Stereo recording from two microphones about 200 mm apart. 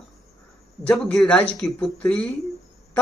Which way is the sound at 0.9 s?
5° left (ahead or behind).